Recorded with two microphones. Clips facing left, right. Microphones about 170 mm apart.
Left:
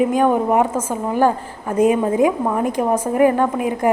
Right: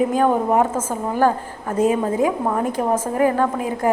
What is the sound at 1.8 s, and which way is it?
A woman's voice, 15° left (ahead or behind).